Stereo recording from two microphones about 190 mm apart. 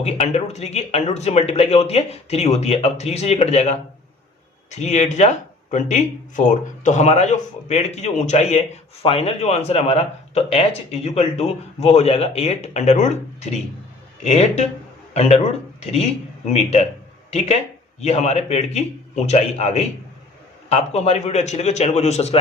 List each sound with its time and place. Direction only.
0.0 s a man's voice: 35° left (ahead or behind)